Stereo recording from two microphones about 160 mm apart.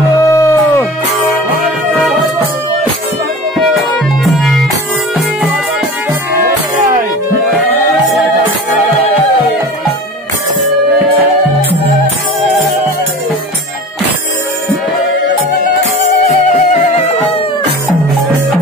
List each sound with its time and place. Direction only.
0.2 s howl: 20° left (ahead or behind)
3.5 s music: centre (ahead or behind)